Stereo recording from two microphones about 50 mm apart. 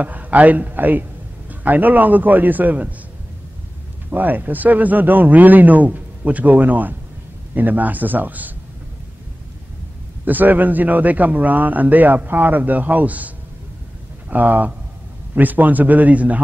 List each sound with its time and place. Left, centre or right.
0.0 s a man's voice: right
4.1 s a man's voice: right
10.2 s a man's voice: right
14.3 s a man's voice: right